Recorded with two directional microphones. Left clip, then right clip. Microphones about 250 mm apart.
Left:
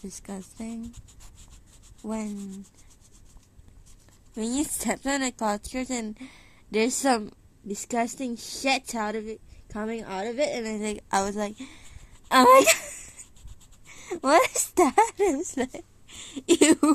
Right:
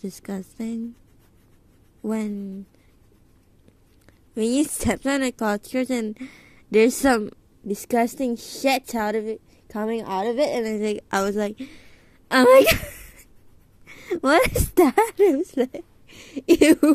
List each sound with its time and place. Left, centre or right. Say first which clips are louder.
0.0 s speech: right 6 dB; centre
2.0 s speech: right 6 dB; centre
4.6 s a woman's voice: right 6 dB; centre